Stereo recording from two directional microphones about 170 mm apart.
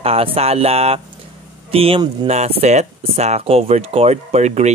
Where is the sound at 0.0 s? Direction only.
35° right (ahead or behind).